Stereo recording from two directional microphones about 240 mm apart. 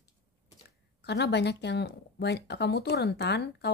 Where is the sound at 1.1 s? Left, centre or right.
Left.